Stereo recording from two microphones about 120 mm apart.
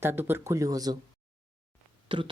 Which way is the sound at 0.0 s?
20° right (ahead or behind).